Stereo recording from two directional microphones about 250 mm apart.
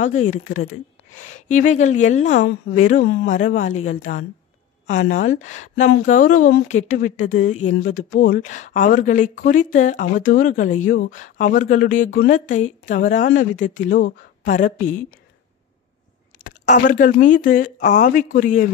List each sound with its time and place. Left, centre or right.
0.0 s speech: left
4.8 s speech: left
16.4 s speech: left